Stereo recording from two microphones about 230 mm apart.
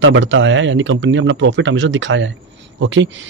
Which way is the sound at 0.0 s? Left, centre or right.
Right.